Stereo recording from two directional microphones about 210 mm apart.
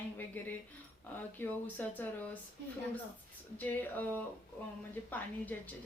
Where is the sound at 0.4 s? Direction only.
10° left (ahead or behind).